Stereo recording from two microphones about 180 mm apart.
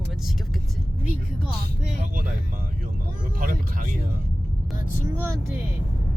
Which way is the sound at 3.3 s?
50° right (ahead or behind).